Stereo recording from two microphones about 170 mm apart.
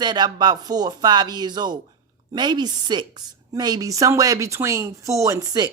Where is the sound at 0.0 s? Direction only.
25° right (ahead or behind).